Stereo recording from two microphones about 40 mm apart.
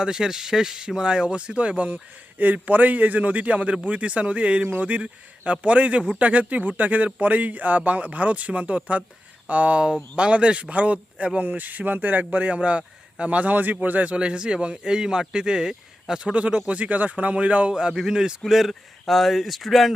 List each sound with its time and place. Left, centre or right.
0.0 s speech: centre; by 2.0 s right
2.4 s speech: right
4.6 s speech: right
11.3 s speech: right
12.3 s speech: right
14.2 s speech: right
16.2 s speech: right
17.7 s speech: right
18.5 s speech: centre